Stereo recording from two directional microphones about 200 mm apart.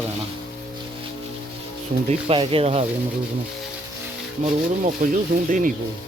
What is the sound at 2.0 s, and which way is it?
Speech, 25° right (ahead or behind).